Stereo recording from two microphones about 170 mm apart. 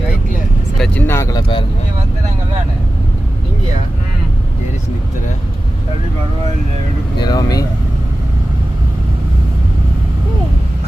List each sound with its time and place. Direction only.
0.8 s speech: 10° left (ahead or behind); by 1.6 s 25° left (ahead or behind)
7.2 s speech: 25° left (ahead or behind)